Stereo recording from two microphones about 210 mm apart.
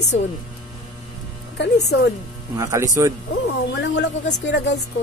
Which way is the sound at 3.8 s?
55° left (ahead or behind).